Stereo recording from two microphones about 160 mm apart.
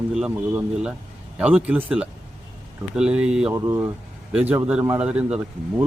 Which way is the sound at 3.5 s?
15° right (ahead or behind).